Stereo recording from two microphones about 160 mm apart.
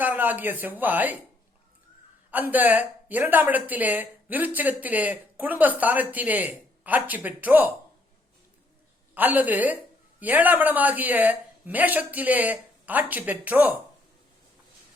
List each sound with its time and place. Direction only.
0.0 s speech: 10° right (ahead or behind)
2.5 s speech: 10° right (ahead or behind)
9.1 s speech: 10° right (ahead or behind)